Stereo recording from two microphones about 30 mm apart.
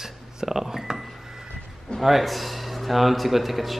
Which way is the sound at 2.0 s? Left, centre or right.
Centre.